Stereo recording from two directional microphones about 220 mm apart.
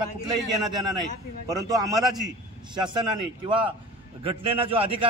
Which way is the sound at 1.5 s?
15° right (ahead or behind).